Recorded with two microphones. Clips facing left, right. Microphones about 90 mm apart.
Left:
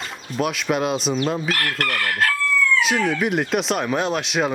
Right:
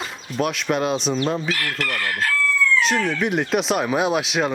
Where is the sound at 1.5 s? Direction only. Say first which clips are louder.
Left 2 dB; 55° left (ahead or behind).